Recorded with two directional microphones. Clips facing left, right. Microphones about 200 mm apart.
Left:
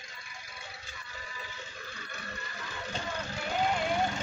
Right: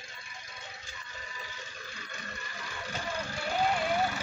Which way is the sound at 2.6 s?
10° right (ahead or behind).